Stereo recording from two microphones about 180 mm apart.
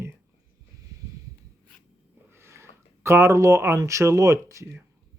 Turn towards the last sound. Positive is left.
turn(degrees=-15)  # may be behind; listen again after turning